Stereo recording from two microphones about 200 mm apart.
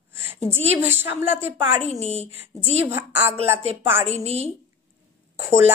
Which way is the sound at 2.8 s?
10° right (ahead or behind).